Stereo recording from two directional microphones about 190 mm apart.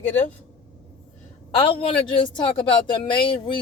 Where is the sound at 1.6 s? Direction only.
30° left (ahead or behind).